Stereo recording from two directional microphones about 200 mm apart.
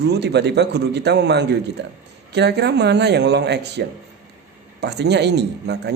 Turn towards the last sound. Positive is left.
turn(degrees=-55)  # may be behind; listen again after turning